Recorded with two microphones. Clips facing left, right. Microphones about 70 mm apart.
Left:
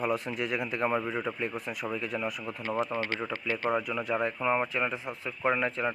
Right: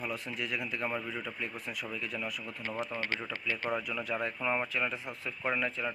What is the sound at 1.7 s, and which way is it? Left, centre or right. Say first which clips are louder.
Speech: left 5 dB; centre.